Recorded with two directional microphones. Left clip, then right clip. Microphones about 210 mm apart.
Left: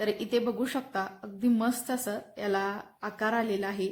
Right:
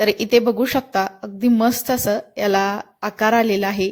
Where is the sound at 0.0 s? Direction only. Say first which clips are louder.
Right 13 dB; 35° right (ahead or behind).